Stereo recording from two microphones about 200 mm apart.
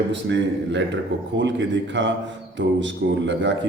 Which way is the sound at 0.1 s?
60° right (ahead or behind).